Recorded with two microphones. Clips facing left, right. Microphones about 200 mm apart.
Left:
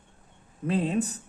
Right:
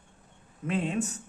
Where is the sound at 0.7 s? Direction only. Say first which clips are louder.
Left 3 dB; 35° left (ahead or behind).